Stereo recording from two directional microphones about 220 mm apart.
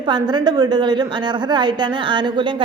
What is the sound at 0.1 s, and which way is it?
A woman's voice, 20° right (ahead or behind).